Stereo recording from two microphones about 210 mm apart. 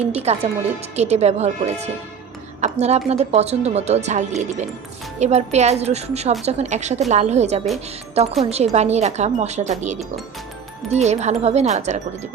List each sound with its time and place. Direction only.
0.0 s a woman's voice: 30° right (ahead or behind)